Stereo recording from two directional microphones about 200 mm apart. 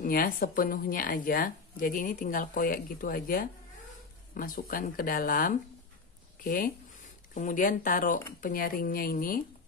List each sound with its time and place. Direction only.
0.0 s speech: 45° left (ahead or behind)